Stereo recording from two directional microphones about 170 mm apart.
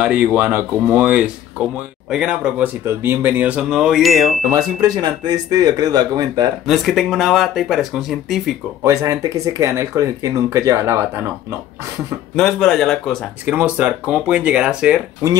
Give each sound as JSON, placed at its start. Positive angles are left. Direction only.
{"t": 0.0, "sound": "speech", "side_deg": -10}
{"t": 4.4, "sound": "speech", "side_deg": -20}
{"t": 6.6, "sound": "speech", "side_deg": 0}
{"t": 8.8, "sound": "speech", "side_deg": -20}
{"t": 12.4, "sound": "speech", "side_deg": 5}
{"t": 13.5, "sound": "speech", "side_deg": -10}